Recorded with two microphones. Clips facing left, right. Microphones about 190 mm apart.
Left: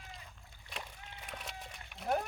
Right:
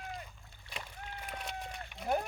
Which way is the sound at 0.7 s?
15° left (ahead or behind).